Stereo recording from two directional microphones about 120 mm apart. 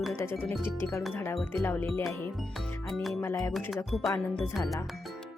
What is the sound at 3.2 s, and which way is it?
Speech, 25° left (ahead or behind).